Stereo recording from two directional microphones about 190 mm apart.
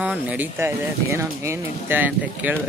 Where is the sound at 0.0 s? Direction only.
5° right (ahead or behind).